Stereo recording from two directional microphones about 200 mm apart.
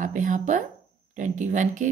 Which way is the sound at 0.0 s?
40° right (ahead or behind).